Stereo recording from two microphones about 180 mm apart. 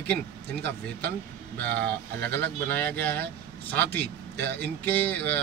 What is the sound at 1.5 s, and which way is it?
A man's voice, 10° left (ahead or behind).